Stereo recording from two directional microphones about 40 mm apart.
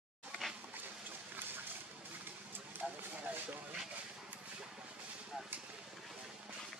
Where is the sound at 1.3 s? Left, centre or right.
Right.